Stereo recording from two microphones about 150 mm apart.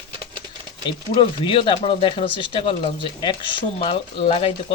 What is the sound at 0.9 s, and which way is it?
Speech, 35° left (ahead or behind).